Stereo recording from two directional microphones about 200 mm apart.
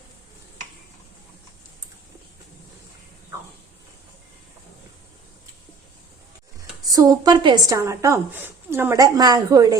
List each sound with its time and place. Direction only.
6.8 s a woman's voice: 20° right (ahead or behind)